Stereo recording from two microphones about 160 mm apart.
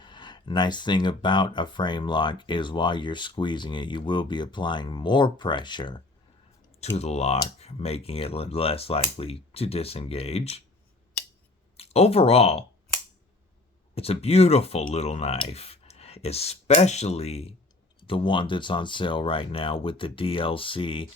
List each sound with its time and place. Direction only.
0.0 s speech: 30° left (ahead or behind)
6.9 s speech: 40° left (ahead or behind)
11.8 s speech: 40° left (ahead or behind)
13.9 s speech: 40° left (ahead or behind)